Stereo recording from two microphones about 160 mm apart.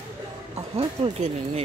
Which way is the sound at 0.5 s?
40° right (ahead or behind).